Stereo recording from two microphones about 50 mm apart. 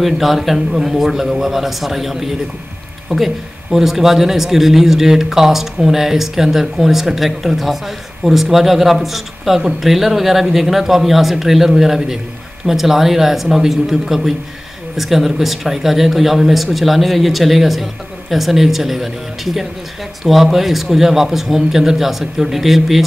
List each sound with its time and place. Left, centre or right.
0.0 s speech: centre